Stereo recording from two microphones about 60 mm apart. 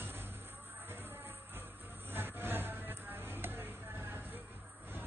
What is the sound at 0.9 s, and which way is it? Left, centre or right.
Music, right.